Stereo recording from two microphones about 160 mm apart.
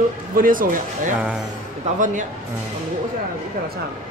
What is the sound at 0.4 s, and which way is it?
Speech, 60° right (ahead or behind).